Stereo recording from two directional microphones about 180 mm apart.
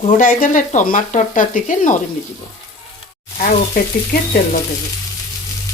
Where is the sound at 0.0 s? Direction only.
45° left (ahead or behind).